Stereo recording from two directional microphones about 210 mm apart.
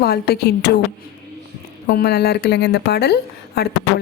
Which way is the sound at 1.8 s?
50° left (ahead or behind).